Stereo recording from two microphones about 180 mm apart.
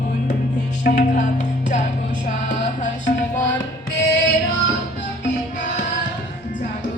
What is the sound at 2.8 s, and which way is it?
Music, 45° left (ahead or behind).